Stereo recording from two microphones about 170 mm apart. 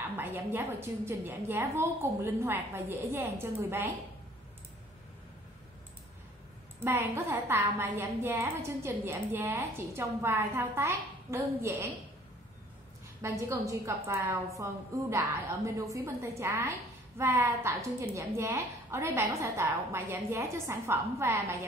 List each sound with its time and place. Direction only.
0.2 s a woman's voice: 10° right (ahead or behind)
6.8 s a woman's voice: 15° right (ahead or behind)
13.2 s a woman's voice: 15° right (ahead or behind)